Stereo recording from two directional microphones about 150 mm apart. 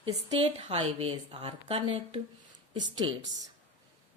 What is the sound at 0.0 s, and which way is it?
Speech, 35° right (ahead or behind).